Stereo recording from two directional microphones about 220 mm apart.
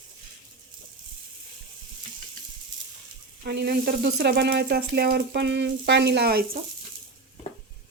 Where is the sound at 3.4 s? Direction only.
45° right (ahead or behind).